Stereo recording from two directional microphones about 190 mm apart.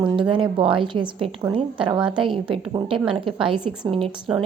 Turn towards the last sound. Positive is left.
turn(degrees=-5)  # may be behind; listen again after turning